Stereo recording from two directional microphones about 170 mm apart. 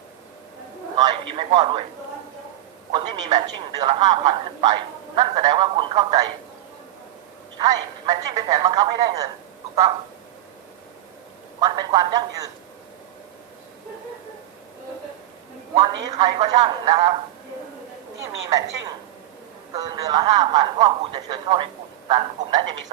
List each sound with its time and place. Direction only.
0.9 s a man's voice: 25° right (ahead or behind)
2.9 s a man's voice: 25° right (ahead or behind)
7.6 s a man's voice: 20° right (ahead or behind)
11.6 s a man's voice: 25° right (ahead or behind)
15.7 s a man's voice: 25° right (ahead or behind)
18.4 s a man's voice: 20° right (ahead or behind)